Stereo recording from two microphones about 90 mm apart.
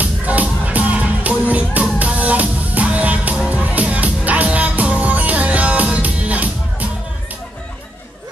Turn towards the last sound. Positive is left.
turn(degrees=-15)  # may be behind; listen again after turning